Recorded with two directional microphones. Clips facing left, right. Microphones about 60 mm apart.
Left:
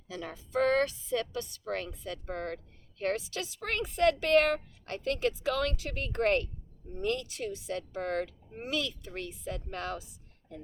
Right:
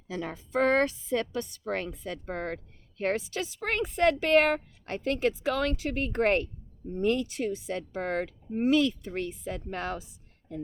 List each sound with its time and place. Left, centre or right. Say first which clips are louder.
0.1 s a woman's voice: right 3 dB; right